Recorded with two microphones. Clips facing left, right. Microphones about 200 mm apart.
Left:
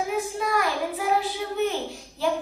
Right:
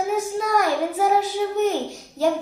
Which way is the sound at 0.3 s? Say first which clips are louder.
Right 5 dB; 45° right (ahead or behind).